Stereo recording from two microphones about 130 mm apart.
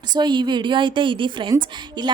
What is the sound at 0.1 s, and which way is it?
A woman's voice, 35° right (ahead or behind).